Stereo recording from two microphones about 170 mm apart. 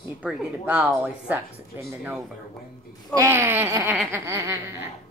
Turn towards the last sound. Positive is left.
turn(degrees=-15)  # may be behind; listen again after turning